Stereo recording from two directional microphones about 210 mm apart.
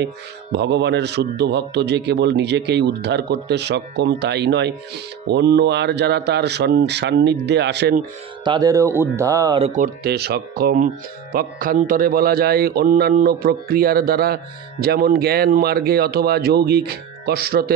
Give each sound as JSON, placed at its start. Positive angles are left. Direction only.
{"t": 0.0, "sound": "speech", "side_deg": -55}
{"t": 8.5, "sound": "speech", "side_deg": -15}
{"t": 9.6, "sound": "speech", "side_deg": -35}
{"t": 10.0, "sound": "speech", "side_deg": -50}